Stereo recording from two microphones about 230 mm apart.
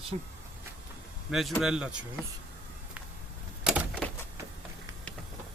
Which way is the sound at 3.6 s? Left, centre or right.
Centre.